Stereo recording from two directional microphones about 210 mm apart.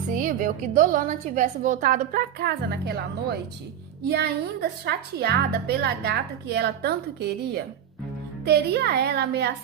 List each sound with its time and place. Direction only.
0.1 s a woman's voice: 40° right (ahead or behind)